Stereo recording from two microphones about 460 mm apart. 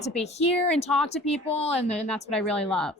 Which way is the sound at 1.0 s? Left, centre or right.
Centre.